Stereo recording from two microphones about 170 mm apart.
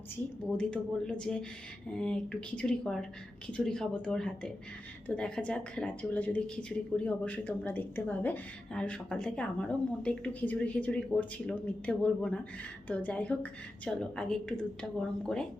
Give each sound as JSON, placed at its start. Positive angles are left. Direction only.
{"t": 0.5, "sound": "speech", "side_deg": 5}